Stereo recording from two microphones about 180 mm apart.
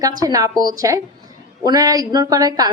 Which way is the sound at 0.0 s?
20° right (ahead or behind).